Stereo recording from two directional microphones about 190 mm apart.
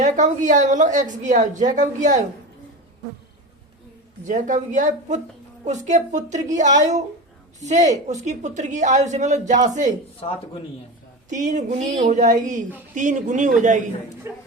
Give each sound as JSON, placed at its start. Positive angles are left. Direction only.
{"t": 0.0, "sound": "a woman's voice", "side_deg": -40}
{"t": 4.3, "sound": "a woman's voice", "side_deg": -40}
{"t": 11.3, "sound": "a woman's voice", "side_deg": -40}
{"t": 14.3, "sound": "speech", "side_deg": -15}